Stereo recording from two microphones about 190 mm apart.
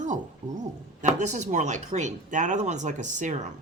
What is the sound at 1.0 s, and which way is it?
Speech, 40° right (ahead or behind).